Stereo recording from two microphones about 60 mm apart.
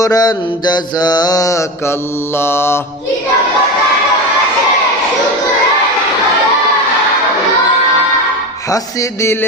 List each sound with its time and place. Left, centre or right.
0.0 s mantra: left
2.4 s mantra: left
9.2 s music: left